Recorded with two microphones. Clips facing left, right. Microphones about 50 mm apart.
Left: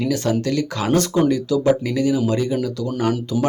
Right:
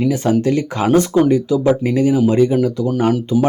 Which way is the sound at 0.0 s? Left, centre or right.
Right.